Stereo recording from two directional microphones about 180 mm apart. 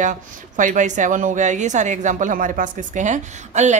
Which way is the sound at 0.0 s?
45° right (ahead or behind).